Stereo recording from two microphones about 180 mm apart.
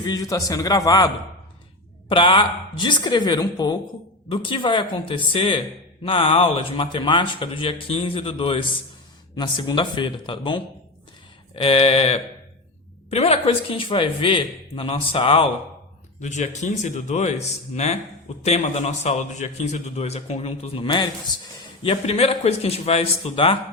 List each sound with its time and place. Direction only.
0.0 s a man's voice: 20° left (ahead or behind)